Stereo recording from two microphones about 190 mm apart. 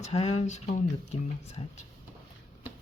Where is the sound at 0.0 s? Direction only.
35° left (ahead or behind).